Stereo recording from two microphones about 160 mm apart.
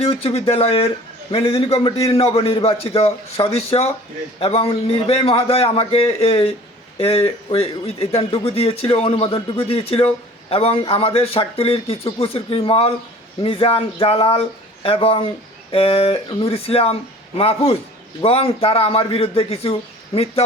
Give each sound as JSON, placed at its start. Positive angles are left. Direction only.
{"t": 0.0, "sound": "speech", "side_deg": 35}